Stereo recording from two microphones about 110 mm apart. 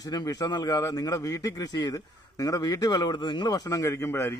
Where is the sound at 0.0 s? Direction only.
35° left (ahead or behind).